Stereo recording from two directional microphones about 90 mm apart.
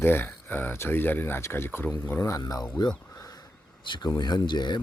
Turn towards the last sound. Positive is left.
turn(degrees=55)  # may be behind; listen again after turning